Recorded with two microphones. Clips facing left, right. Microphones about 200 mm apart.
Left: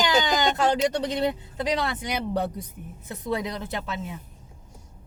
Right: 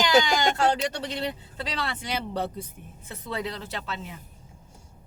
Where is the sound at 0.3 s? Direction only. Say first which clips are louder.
Left 1 dB; 20° left (ahead or behind).